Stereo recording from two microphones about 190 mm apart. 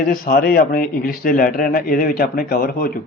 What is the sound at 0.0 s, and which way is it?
Speech, 50° left (ahead or behind).